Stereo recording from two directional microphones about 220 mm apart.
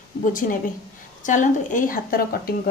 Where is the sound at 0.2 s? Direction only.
40° left (ahead or behind).